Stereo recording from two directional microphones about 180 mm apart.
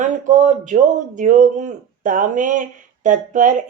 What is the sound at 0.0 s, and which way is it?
Speech, 45° right (ahead or behind).